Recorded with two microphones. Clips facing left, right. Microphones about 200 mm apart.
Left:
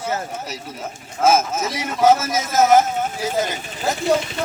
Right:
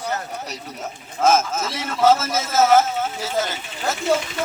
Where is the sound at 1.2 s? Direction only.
10° left (ahead or behind).